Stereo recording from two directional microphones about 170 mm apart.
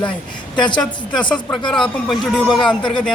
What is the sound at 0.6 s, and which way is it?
Speech, 25° left (ahead or behind).